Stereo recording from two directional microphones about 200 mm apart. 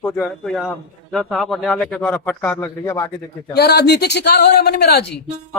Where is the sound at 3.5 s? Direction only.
55° left (ahead or behind).